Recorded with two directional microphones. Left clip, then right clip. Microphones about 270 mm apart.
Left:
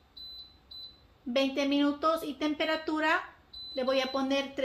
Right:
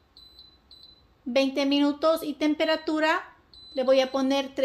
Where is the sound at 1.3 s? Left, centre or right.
Right.